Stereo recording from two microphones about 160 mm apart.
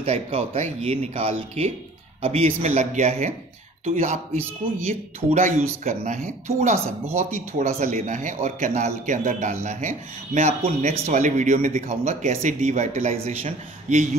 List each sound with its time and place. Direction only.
0.0 s a man's voice: 40° right (ahead or behind)
5.3 s a man's voice: 45° right (ahead or behind)